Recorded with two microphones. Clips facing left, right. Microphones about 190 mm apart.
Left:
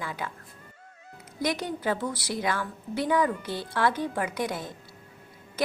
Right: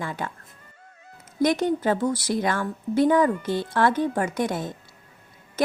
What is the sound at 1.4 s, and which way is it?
Speech, 50° right (ahead or behind).